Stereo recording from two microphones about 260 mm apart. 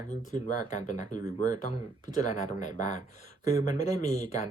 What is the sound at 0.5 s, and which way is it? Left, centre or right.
Speech, left.